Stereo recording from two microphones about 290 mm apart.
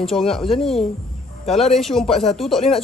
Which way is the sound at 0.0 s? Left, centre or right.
Centre.